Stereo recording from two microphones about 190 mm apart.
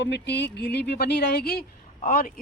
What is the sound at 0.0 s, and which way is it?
Speech, 65° left (ahead or behind).